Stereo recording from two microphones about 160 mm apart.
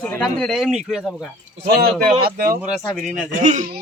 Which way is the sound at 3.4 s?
50° right (ahead or behind).